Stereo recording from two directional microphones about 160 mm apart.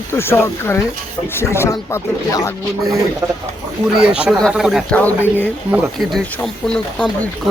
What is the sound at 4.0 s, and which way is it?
Speech, 5° right (ahead or behind).